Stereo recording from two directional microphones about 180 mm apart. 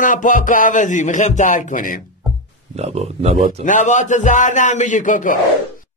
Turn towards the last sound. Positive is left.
turn(degrees=45)  # may be behind; listen again after turning